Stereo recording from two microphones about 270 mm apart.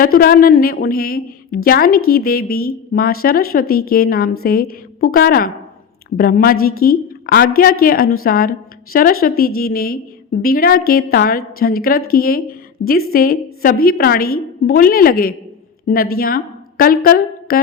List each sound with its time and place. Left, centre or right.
0.0 s a woman's voice: left